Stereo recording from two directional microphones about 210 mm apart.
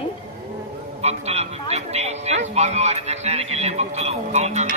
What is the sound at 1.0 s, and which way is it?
A woman's voice, 30° right (ahead or behind).